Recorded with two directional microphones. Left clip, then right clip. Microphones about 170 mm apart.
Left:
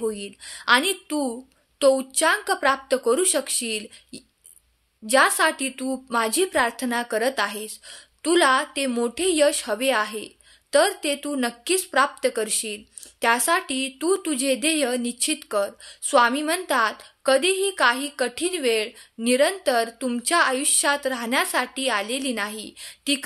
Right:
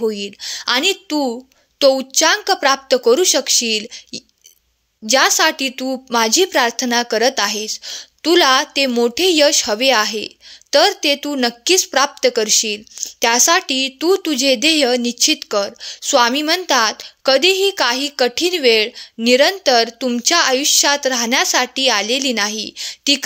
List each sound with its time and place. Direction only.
0.0 s speech: 35° right (ahead or behind)